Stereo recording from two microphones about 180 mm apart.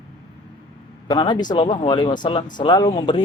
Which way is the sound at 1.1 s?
25° left (ahead or behind).